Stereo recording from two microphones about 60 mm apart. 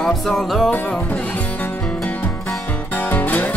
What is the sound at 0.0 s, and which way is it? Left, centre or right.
Music, centre.